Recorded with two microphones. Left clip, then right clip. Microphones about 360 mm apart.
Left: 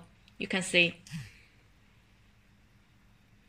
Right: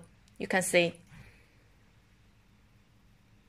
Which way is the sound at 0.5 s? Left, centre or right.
Centre.